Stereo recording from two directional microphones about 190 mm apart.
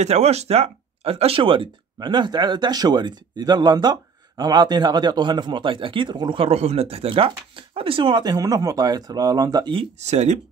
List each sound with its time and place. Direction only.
0.0 s speech: 35° right (ahead or behind)